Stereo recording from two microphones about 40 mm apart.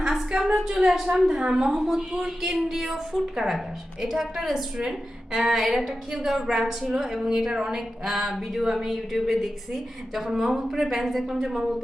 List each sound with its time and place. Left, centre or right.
0.3 s a woman's voice: centre